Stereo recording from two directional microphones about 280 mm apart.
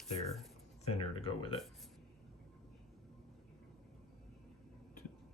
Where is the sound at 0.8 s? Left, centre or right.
Left.